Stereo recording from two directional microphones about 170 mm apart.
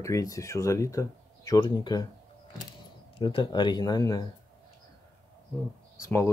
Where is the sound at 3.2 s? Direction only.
30° left (ahead or behind).